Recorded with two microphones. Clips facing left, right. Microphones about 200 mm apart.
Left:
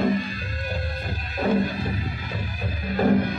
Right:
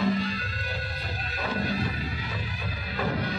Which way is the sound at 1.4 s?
50° left (ahead or behind).